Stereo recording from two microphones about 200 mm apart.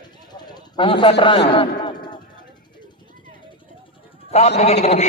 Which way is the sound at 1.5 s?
25° left (ahead or behind).